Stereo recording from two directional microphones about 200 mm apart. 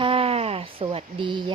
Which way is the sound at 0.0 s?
30° right (ahead or behind).